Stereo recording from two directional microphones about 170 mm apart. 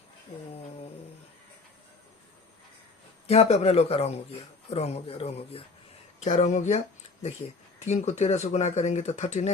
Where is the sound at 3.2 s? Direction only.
35° left (ahead or behind).